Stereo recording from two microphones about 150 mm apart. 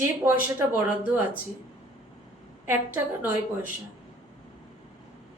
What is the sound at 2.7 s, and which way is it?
A woman's voice, 15° right (ahead or behind).